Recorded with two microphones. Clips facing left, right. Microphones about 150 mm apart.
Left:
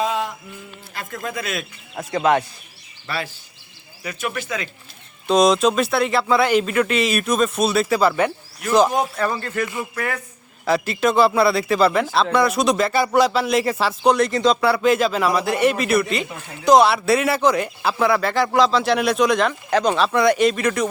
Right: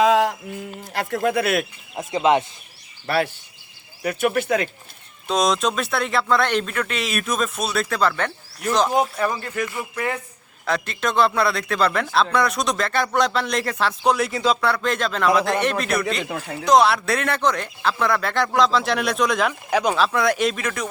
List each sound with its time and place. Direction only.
0.0 s a sound: 90° right
0.9 s a man's voice: 65° right (ahead or behind)
2.0 s speech: 20° right (ahead or behind)
3.1 s a man's voice: 65° right (ahead or behind)
5.3 s a man's voice: centre (ahead or behind)
8.9 s a man's voice: 20° right (ahead or behind)
10.7 s a man's voice: 5° left (ahead or behind)